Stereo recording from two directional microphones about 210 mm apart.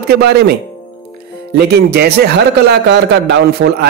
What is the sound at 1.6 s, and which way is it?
A man's voice, 50° right (ahead or behind).